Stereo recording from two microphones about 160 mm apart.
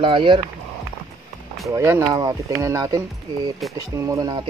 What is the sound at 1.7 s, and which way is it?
Speech, 20° right (ahead or behind).